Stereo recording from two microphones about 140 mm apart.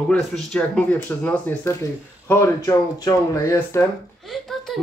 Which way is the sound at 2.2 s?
20° left (ahead or behind).